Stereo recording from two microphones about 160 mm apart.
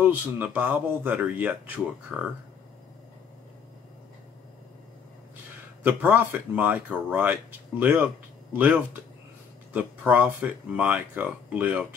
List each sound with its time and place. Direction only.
0.0 s speech: 10° right (ahead or behind)
5.9 s speech: 10° right (ahead or behind)